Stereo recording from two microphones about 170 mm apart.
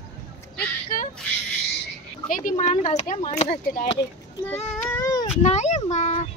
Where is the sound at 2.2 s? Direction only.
50° left (ahead or behind).